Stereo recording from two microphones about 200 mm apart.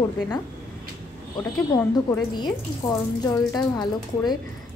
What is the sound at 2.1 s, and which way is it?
Speech, 15° left (ahead or behind).